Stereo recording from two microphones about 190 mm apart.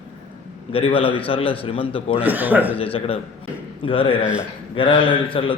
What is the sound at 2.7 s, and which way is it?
A man's voice, 30° left (ahead or behind).